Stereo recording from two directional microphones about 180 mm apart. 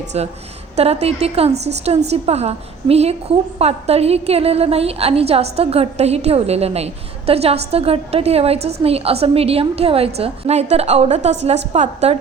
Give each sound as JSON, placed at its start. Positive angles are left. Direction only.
{"t": 0.1, "sound": "a woman's voice", "side_deg": -35}